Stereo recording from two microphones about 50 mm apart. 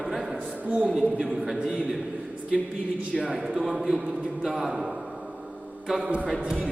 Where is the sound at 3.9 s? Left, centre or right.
Centre.